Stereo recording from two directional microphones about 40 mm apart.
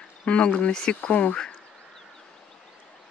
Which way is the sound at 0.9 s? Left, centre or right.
Left.